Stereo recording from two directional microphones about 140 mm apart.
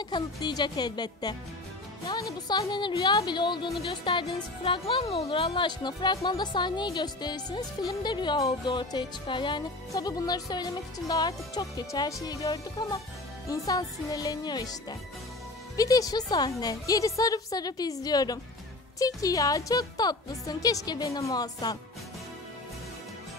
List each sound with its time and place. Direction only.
0.0 s speech: 30° left (ahead or behind)